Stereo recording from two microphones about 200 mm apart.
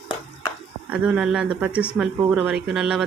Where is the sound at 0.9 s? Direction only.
5° right (ahead or behind).